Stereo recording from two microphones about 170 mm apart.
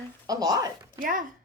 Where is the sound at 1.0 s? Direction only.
50° right (ahead or behind).